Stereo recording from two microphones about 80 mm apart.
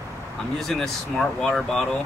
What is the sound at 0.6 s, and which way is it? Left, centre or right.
Speech, centre.